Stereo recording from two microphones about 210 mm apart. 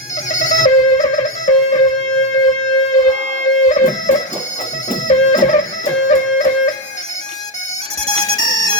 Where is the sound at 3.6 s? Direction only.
35° left (ahead or behind).